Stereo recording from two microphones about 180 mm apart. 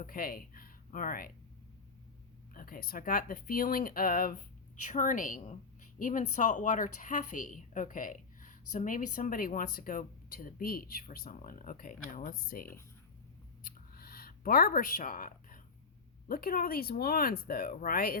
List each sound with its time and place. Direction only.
0.0 s speech: 50° left (ahead or behind)
2.5 s a woman's voice: 50° left (ahead or behind)
13.7 s a sound: 55° left (ahead or behind)
16.3 s a woman's voice: 55° left (ahead or behind)